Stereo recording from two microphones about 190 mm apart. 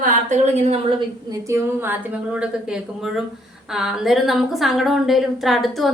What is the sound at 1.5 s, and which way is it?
A woman's voice, 10° right (ahead or behind).